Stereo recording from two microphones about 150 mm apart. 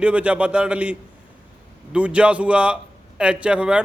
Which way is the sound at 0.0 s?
10° right (ahead or behind).